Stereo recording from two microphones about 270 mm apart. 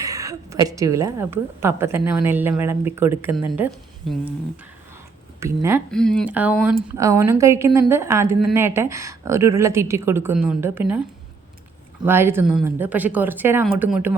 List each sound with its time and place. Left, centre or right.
0.0 s a woman's voice: centre
5.4 s speech: centre
5.9 s a woman's voice: centre
12.0 s a woman's voice: centre